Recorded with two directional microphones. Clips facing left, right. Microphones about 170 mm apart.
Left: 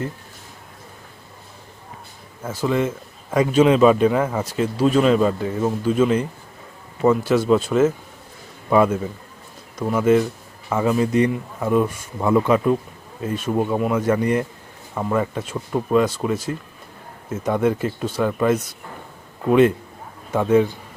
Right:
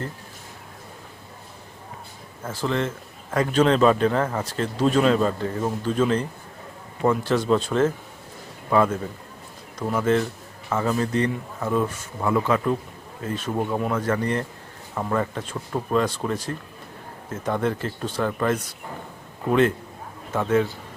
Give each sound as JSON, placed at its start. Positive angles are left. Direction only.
{"t": 2.4, "sound": "a man's voice", "side_deg": 10}
{"t": 17.4, "sound": "a man's voice", "side_deg": 10}